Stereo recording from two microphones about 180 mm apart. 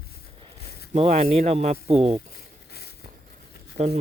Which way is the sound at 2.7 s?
60° left (ahead or behind).